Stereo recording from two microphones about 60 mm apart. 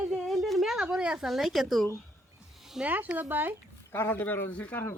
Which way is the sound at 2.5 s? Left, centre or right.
Centre.